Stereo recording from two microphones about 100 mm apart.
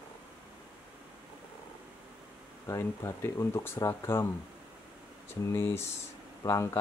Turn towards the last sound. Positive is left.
turn(degrees=35)  # may be behind; listen again after turning